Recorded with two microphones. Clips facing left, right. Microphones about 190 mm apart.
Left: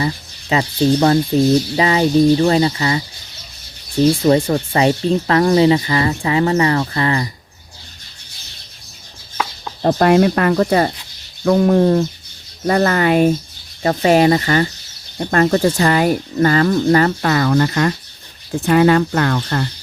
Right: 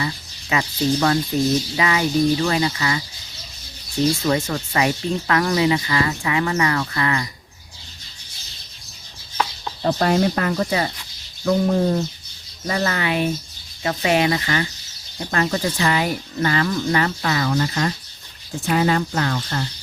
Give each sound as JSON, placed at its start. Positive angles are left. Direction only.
{"t": 0.5, "sound": "speech", "side_deg": 30}
{"t": 4.3, "sound": "speech", "side_deg": 35}
{"t": 9.8, "sound": "speech", "side_deg": 60}
{"t": 11.4, "sound": "speech", "side_deg": 70}